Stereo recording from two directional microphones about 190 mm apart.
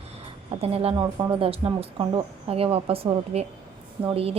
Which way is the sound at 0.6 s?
30° right (ahead or behind).